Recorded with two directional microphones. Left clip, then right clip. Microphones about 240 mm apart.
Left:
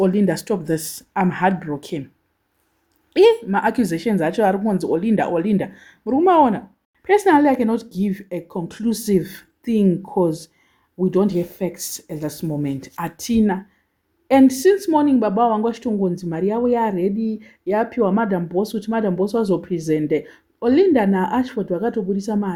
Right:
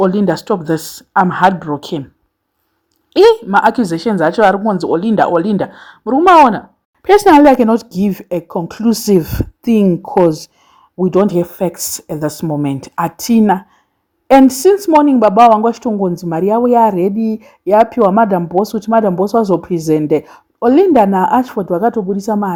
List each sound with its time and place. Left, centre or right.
0.0 s a woman's voice: centre
3.1 s a woman's voice: centre
7.0 s speech: right